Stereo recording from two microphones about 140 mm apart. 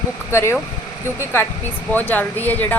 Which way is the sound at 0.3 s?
20° left (ahead or behind).